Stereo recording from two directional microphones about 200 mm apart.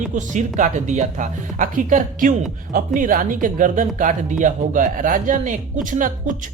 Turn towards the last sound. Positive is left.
turn(degrees=-40)  # may be behind; listen again after turning